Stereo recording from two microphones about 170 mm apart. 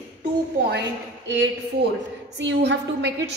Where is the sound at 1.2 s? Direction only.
90° right.